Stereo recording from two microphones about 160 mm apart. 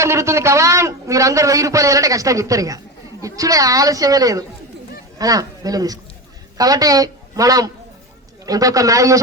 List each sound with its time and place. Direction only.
0.0 s a man's voice: 20° right (ahead or behind)